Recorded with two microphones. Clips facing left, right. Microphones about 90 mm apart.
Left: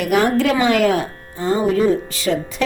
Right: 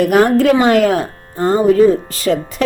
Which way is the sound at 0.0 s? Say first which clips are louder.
Right 5 dB; 40° right (ahead or behind).